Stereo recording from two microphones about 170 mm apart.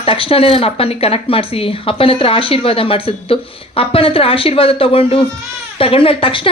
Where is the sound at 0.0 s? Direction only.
30° left (ahead or behind).